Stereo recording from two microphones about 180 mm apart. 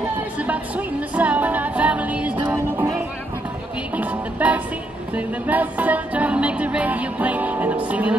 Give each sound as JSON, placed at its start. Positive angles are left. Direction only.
{"t": 0.4, "sound": "music", "side_deg": -10}
{"t": 5.1, "sound": "speech", "side_deg": -10}